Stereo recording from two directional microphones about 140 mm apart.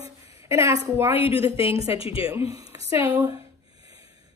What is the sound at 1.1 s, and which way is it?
Speech, 45° left (ahead or behind).